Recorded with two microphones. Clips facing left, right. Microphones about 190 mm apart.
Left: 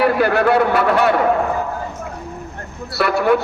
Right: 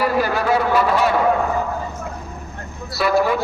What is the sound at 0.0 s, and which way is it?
A man's voice, 60° left (ahead or behind).